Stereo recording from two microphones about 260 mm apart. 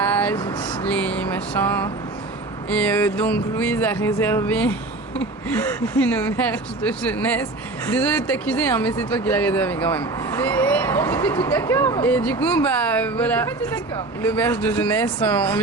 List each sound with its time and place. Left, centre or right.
0.0 s a sound: centre
0.3 s speech: centre
0.9 s speech: centre